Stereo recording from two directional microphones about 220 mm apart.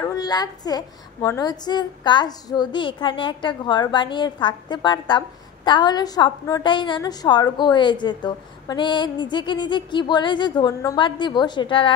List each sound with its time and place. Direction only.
0.0 s a woman's voice: 15° left (ahead or behind)